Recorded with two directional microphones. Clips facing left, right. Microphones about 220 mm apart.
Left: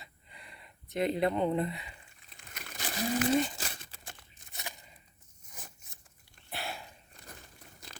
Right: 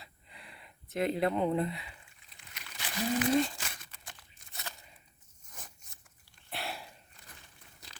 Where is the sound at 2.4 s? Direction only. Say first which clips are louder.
Left 5 dB; 45° left (ahead or behind).